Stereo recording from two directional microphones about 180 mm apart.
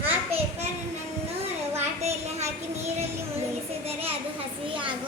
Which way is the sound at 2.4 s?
40° right (ahead or behind).